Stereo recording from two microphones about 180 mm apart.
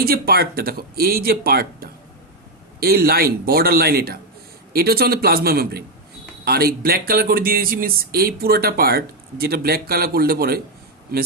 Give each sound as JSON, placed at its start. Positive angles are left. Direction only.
{"t": 0.0, "sound": "speech", "side_deg": -60}